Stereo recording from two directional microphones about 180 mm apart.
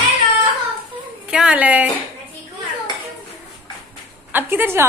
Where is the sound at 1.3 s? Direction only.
5° right (ahead or behind).